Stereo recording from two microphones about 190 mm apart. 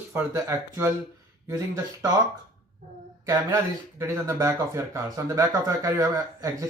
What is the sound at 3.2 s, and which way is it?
Speech, 15° right (ahead or behind).